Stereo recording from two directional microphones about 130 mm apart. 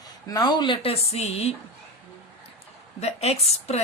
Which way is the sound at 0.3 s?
30° left (ahead or behind).